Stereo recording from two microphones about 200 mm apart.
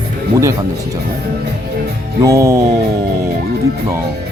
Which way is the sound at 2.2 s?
15° right (ahead or behind).